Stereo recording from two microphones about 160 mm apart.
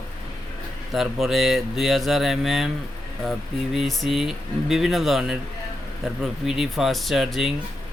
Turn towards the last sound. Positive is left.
turn(degrees=0)  # may be behind; listen again after turning